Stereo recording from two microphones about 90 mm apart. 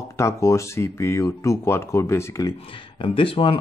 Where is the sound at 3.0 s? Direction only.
80° left.